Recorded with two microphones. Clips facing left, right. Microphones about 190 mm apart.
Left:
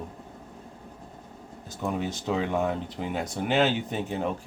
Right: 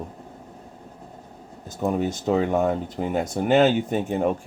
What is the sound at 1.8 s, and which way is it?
Speech, 45° right (ahead or behind).